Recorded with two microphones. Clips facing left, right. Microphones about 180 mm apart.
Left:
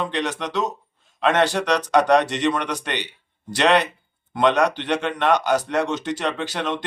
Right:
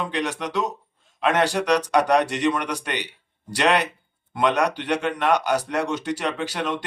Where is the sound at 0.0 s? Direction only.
10° right (ahead or behind).